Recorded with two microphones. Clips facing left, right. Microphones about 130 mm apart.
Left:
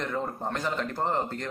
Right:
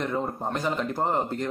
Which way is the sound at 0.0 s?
15° right (ahead or behind).